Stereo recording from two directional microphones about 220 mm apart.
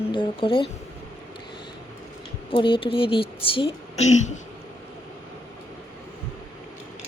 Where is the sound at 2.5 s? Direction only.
25° left (ahead or behind).